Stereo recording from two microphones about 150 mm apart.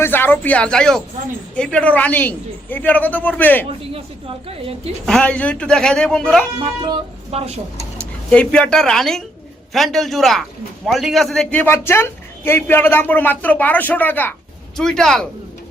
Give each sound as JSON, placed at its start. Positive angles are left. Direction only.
{"t": 0.0, "sound": "a man's voice", "side_deg": 15}
{"t": 4.4, "sound": "a woman's voice", "side_deg": -40}
{"t": 5.0, "sound": "speech", "side_deg": 5}
{"t": 7.3, "sound": "speech", "side_deg": -45}
{"t": 7.9, "sound": "speech", "side_deg": 5}
{"t": 11.6, "sound": "a man's voice", "side_deg": 15}